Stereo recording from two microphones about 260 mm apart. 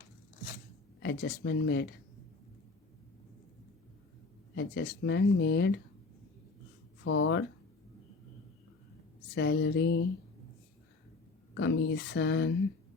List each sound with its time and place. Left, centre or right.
0.9 s speech: left
4.5 s speech: left
7.0 s speech: left
9.3 s speech: left
11.5 s speech: left